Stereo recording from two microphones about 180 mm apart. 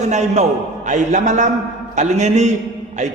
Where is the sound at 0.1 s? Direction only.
40° right (ahead or behind).